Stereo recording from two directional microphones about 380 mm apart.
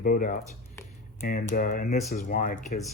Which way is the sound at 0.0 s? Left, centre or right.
Left.